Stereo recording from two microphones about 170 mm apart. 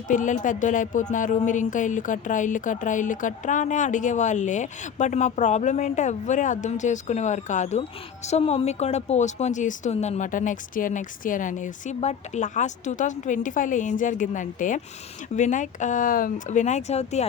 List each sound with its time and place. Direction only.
0.1 s a woman's voice: 50° left (ahead or behind)